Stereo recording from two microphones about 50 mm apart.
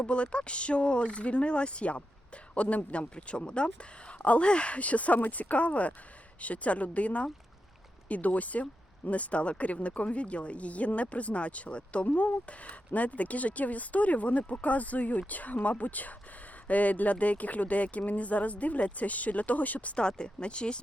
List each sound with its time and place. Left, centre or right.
0.0 s speech: left
20.0 s speech: centre